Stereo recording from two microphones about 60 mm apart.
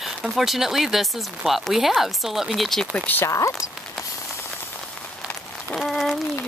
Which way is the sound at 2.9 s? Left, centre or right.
Left.